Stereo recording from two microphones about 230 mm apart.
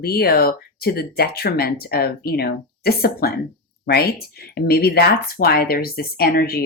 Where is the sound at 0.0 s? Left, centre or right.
Left.